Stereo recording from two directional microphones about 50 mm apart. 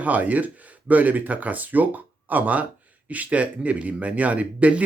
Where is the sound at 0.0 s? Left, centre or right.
Right.